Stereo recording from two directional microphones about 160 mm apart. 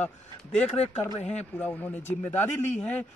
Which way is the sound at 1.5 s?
10° left (ahead or behind).